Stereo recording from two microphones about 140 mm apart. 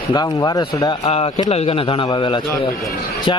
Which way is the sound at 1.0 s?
45° left (ahead or behind).